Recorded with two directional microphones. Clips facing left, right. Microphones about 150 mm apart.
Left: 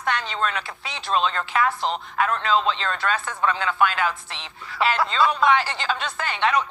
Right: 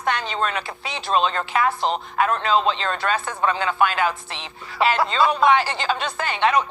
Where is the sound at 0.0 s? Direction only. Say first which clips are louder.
Right 2 dB; 15° right (ahead or behind).